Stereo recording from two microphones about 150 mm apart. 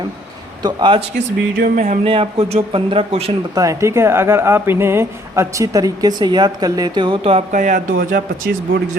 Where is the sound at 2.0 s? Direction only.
40° right (ahead or behind).